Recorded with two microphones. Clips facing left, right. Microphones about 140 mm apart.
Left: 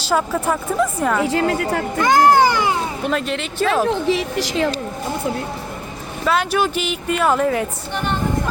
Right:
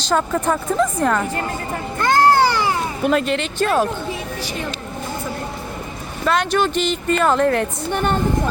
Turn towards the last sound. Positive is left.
turn(degrees=5)  # may be behind; listen again after turning